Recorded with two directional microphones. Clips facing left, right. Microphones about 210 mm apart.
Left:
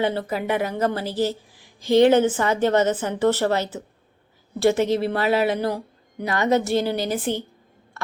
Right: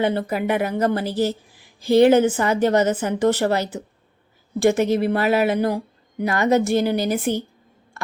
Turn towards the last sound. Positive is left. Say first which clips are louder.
# right 3 dB
turn(degrees=-10)  # may be behind; listen again after turning